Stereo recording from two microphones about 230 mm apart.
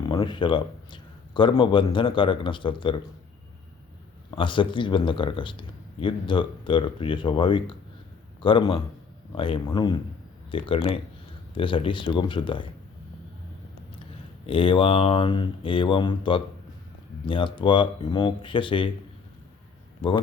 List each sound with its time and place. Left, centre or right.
0.0 s speech: centre
4.4 s a man's voice: left
14.4 s a man's voice: left